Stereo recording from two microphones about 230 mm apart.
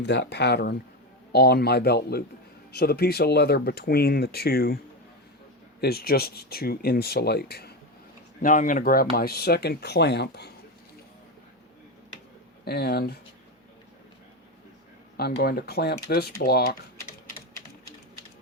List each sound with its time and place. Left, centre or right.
0.0 s speech: left
5.8 s speech: left
12.6 s speech: left
15.2 s speech: left